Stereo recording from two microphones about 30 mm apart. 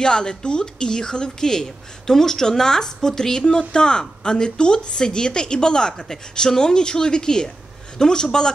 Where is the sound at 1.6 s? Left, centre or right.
Centre.